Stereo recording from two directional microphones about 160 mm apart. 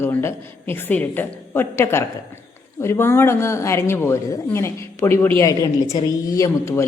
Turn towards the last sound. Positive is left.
turn(degrees=15)  # may be behind; listen again after turning